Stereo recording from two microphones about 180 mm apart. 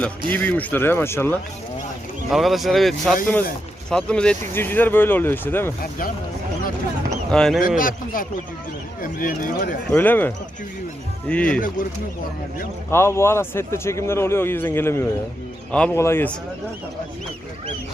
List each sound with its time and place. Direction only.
0.3 s speech: 10° left (ahead or behind)
2.3 s speech: centre (ahead or behind)
7.3 s speech: 5° left (ahead or behind)
7.8 s speech: 50° left (ahead or behind)
9.9 s speech: 10° left (ahead or behind)
12.9 s speech: 15° left (ahead or behind)